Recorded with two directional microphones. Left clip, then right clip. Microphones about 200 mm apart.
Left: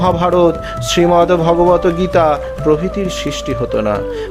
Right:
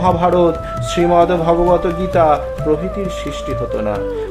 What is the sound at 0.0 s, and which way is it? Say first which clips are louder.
Speech: left 1 dB; 25° left (ahead or behind).